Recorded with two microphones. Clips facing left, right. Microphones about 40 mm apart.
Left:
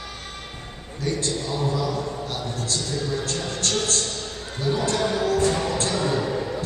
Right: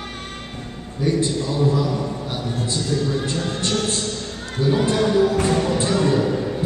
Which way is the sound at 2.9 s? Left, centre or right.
Centre.